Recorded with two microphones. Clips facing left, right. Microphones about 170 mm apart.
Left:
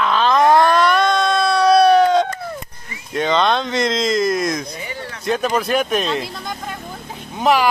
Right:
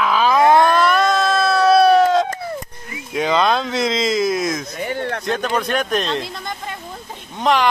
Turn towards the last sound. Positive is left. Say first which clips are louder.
# left 1 dB
turn(degrees=5)  # may be behind; listen again after turning